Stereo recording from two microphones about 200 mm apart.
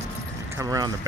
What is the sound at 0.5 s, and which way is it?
Vehicle, 15° right (ahead or behind).